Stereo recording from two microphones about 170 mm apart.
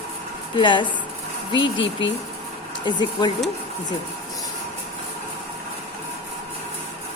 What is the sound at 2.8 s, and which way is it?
Speech, 25° left (ahead or behind).